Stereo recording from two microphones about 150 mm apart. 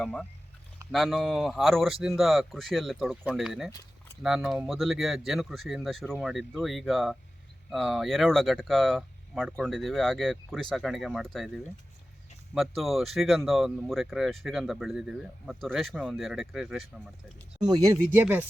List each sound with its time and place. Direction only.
0.0 s speech: 5° left (ahead or behind)
17.6 s speech: 25° right (ahead or behind)
18.1 s speech: 10° right (ahead or behind)